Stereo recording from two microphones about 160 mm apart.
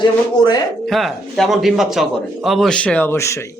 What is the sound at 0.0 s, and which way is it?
Speech, 25° left (ahead or behind).